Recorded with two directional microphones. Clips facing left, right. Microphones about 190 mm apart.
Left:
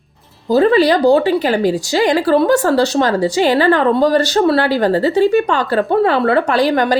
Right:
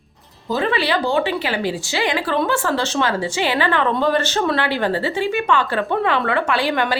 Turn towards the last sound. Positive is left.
turn(degrees=40)  # may be behind; listen again after turning